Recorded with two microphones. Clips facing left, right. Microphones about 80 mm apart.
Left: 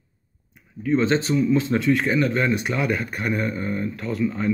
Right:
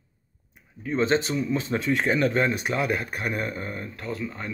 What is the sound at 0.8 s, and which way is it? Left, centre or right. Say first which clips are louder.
Speech: left 3 dB; right.